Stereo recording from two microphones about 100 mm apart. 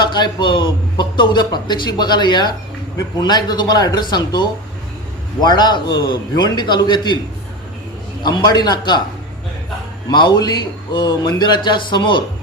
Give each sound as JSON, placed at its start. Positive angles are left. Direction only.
{"t": 0.0, "sound": "a man's voice", "side_deg": 45}
{"t": 8.2, "sound": "a man's voice", "side_deg": 50}
{"t": 10.1, "sound": "a man's voice", "side_deg": 50}